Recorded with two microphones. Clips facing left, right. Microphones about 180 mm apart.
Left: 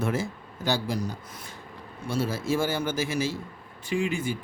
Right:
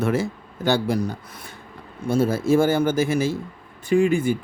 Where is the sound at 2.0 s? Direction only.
50° right (ahead or behind).